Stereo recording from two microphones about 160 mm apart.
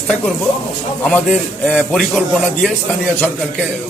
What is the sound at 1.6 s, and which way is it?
Speech, 5° left (ahead or behind).